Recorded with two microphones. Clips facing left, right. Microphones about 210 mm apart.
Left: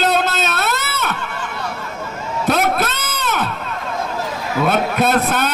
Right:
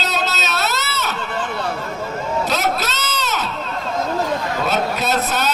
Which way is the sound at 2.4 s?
55° left (ahead or behind).